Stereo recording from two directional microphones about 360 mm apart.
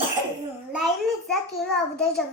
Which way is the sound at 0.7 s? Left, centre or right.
Centre.